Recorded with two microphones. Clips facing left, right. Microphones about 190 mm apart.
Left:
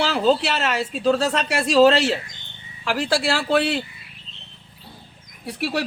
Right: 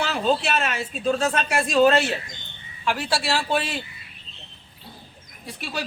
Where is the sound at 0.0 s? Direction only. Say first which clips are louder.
Left 4 dB; 90° left; by 3.8 s 70° left (ahead or behind).